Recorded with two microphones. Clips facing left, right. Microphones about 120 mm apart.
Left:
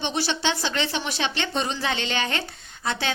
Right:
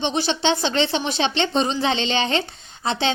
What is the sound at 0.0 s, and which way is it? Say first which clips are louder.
A woman's voice: right 4 dB; 25° right (ahead or behind).